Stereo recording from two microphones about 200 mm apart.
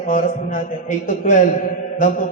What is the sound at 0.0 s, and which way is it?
A man's voice, 45° left (ahead or behind).